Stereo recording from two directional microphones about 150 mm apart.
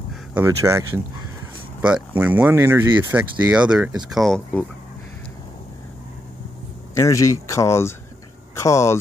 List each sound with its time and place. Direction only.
0.3 s speech: 15° right (ahead or behind)
1.8 s speech: 10° right (ahead or behind)
7.0 s speech: 20° left (ahead or behind)